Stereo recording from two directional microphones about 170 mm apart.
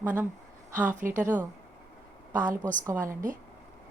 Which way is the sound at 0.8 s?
50° right (ahead or behind).